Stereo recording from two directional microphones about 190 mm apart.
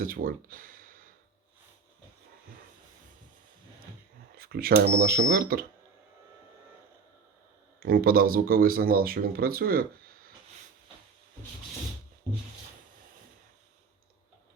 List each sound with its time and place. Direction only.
0.0 s speech: 45° right (ahead or behind)
4.4 s speech: 50° right (ahead or behind)
7.8 s speech: 50° right (ahead or behind)